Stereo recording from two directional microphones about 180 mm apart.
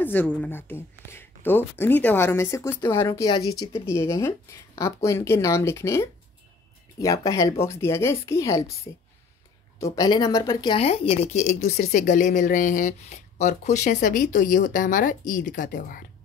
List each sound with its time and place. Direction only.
0.0 s speech: 10° left (ahead or behind)
9.8 s speech: 20° left (ahead or behind); by 16.1 s 50° left (ahead or behind)